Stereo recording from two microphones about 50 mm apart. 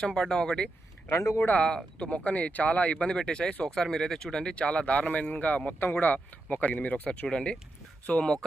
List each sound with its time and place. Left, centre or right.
0.0 s speech: centre
1.1 s speech: left
1.4 s speech: left
1.6 s speech: centre